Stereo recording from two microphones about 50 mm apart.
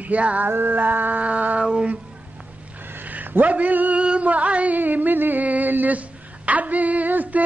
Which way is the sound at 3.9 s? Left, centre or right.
Right.